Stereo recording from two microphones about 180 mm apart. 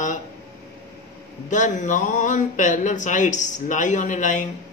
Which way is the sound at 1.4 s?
45° left (ahead or behind).